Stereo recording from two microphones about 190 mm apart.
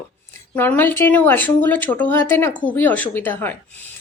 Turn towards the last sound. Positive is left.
turn(degrees=10)  # may be behind; listen again after turning